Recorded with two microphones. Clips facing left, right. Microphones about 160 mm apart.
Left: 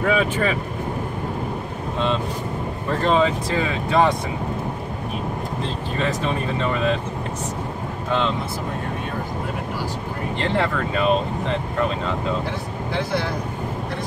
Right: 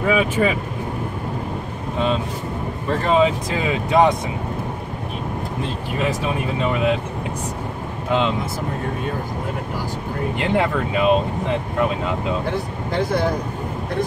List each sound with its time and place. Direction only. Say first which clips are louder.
0.0 s speech: right 2 dB; 10° right (ahead or behind)
3.1 s speech: right 2 dB; 15° right (ahead or behind)
5.9 s speech: right 1 dB; 10° right (ahead or behind)
10.4 s speech: right 2 dB; 15° right (ahead or behind)
12.9 s speech: right 4 dB; 50° right (ahead or behind)